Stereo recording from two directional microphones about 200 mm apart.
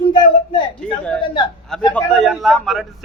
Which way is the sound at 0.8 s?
5° left (ahead or behind).